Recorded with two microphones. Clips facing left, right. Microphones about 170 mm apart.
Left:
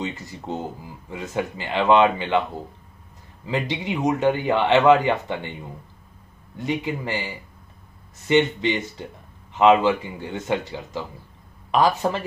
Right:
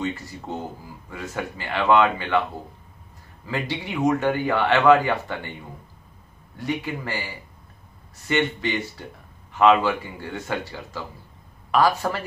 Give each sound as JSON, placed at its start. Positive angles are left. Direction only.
{"t": 0.0, "sound": "speech", "side_deg": 20}
{"t": 3.4, "sound": "speech", "side_deg": 20}